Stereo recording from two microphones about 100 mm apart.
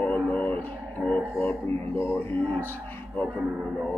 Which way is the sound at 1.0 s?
10° right (ahead or behind).